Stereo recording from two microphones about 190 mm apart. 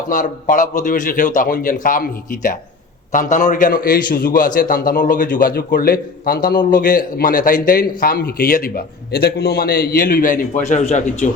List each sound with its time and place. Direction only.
0.1 s a man's voice: 45° left (ahead or behind)